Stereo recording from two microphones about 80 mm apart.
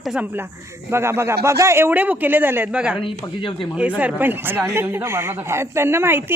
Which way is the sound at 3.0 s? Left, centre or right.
Left.